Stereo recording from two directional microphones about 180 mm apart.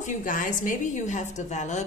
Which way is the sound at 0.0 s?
45° left (ahead or behind).